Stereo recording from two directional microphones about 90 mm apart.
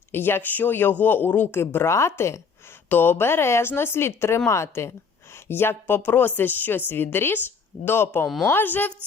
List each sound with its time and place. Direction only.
0.1 s speech: 25° left (ahead or behind)